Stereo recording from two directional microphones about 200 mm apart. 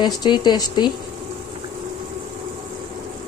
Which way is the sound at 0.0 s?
20° left (ahead or behind).